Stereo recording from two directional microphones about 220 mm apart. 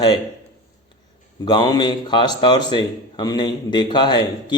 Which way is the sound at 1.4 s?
20° left (ahead or behind).